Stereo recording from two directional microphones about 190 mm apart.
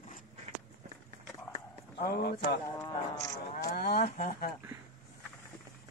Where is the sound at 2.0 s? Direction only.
60° left (ahead or behind).